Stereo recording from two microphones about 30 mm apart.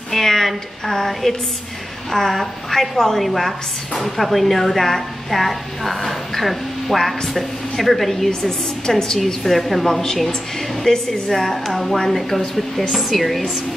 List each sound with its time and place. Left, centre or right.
0.1 s a sound: centre
0.8 s a woman's voice: centre
10.9 s a woman's voice: left
11.3 s a woman's voice: centre